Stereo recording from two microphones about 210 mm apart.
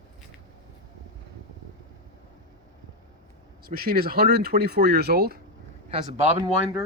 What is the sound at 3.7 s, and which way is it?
Speech, 45° right (ahead or behind).